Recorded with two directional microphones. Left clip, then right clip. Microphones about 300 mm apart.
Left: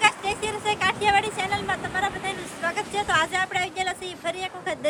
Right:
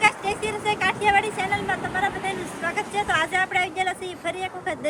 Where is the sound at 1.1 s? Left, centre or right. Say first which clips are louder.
Right 1 dB; centre.